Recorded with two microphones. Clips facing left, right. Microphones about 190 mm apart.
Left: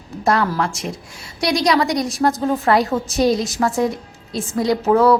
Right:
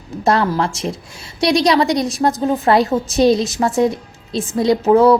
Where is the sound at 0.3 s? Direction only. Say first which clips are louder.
Right 2 dB; 25° right (ahead or behind).